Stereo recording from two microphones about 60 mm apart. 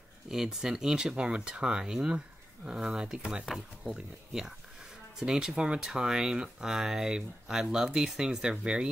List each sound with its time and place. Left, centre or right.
0.3 s speech: centre